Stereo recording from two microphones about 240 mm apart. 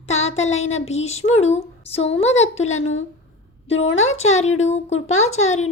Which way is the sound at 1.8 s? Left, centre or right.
Left.